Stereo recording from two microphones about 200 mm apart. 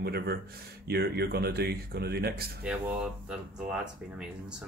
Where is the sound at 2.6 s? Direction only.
5° right (ahead or behind).